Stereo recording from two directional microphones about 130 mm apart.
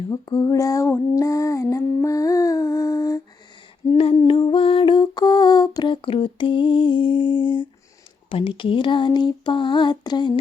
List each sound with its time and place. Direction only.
0.1 s female singing: 30° left (ahead or behind)
3.9 s humming: 45° left (ahead or behind)
4.3 s lullaby: 45° left (ahead or behind)
8.3 s a sound: 45° left (ahead or behind)